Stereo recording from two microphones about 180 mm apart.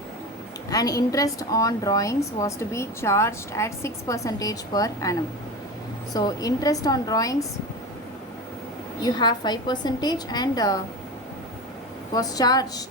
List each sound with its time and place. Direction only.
0.7 s a woman's voice: 20° left (ahead or behind)
6.1 s a woman's voice: 20° left (ahead or behind)
9.0 s a woman's voice: 25° left (ahead or behind)
12.1 s a woman's voice: 20° left (ahead or behind)